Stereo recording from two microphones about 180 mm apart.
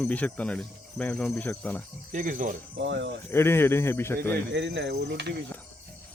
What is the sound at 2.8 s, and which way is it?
Speech, 80° right.